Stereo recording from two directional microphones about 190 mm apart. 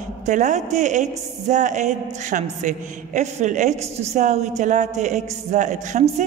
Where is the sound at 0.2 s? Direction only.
40° right (ahead or behind).